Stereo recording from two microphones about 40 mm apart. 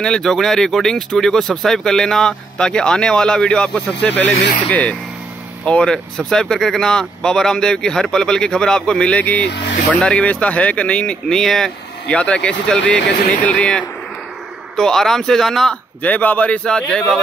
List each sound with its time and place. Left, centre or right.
0.0 s speech: centre
4.2 s speech: left
5.7 s speech: left
6.1 s speech: centre
9.1 s speech: left
11.2 s speech: centre
12.1 s speech: left
14.8 s speech: centre
16.0 s speech: left
16.6 s speech: left